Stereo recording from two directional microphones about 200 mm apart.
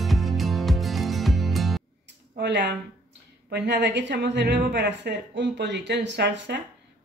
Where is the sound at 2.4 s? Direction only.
60° right (ahead or behind).